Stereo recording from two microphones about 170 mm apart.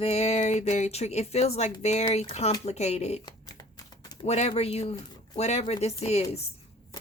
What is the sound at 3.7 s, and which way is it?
Typewriter, 20° left (ahead or behind).